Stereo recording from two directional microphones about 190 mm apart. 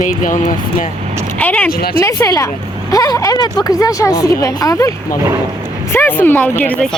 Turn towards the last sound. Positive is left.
turn(degrees=10)  # may be behind; listen again after turning